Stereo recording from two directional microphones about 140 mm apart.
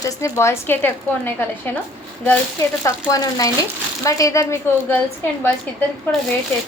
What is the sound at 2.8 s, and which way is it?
A woman's voice, 25° left (ahead or behind).